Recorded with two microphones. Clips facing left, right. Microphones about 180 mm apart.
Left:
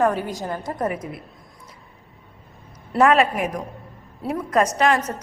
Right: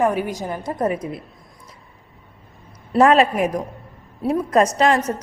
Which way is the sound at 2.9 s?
35° right (ahead or behind).